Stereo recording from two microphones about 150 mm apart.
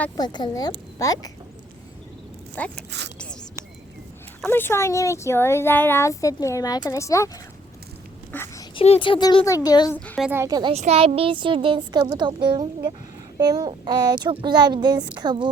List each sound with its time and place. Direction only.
0.2 s speech: 30° left (ahead or behind)
2.6 s speech: 10° left (ahead or behind)
4.4 s speech: 15° left (ahead or behind)
8.3 s a sound: 15° left (ahead or behind)
8.7 s speech: 40° left (ahead or behind)
10.3 s speech: 20° right (ahead or behind)
10.8 s a woman's voice: 45° right (ahead or behind)